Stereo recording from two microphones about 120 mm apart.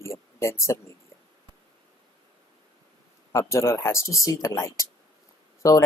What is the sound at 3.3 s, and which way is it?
Speech, 25° left (ahead or behind).